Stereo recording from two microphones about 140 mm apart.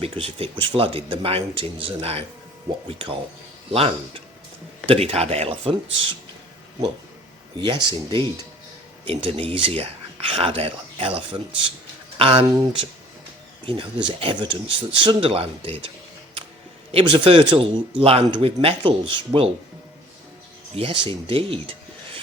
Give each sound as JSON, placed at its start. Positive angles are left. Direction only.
{"t": 0.0, "sound": "speech", "side_deg": -45}
{"t": 3.7, "sound": "speech", "side_deg": -45}
{"t": 7.6, "sound": "speech", "side_deg": -35}
{"t": 12.2, "sound": "speech", "side_deg": -40}
{"t": 16.9, "sound": "speech", "side_deg": -40}
{"t": 20.7, "sound": "speech", "side_deg": -40}